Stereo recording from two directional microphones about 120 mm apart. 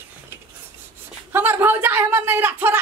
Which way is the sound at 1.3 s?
15° right (ahead or behind).